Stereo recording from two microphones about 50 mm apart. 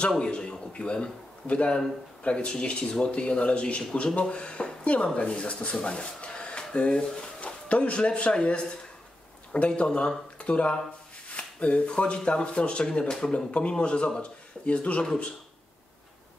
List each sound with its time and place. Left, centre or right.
0.2 s speech: left